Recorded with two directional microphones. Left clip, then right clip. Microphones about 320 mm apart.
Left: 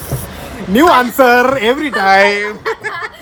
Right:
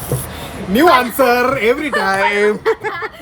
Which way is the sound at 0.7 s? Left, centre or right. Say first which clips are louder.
Left 2 dB; centre.